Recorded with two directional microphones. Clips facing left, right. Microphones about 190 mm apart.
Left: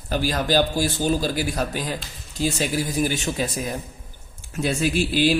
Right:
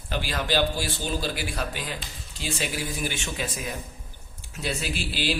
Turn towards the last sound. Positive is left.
turn(degrees=50)  # may be behind; listen again after turning